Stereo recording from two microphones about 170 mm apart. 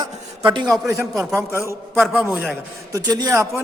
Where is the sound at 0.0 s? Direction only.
25° right (ahead or behind).